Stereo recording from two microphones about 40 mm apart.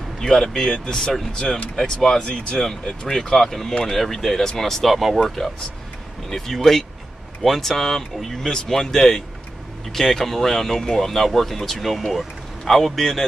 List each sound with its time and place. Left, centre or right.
0.2 s speech: centre; by 2.6 s left
2.6 s speech: centre
6.3 s speech: centre